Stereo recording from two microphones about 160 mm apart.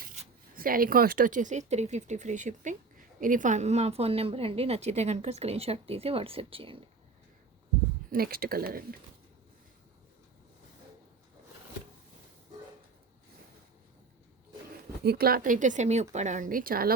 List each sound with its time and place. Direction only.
0.5 s speech: 65° right (ahead or behind); by 6.8 s 35° right (ahead or behind)
8.1 s speech: 70° right (ahead or behind)
15.0 s speech: 80° right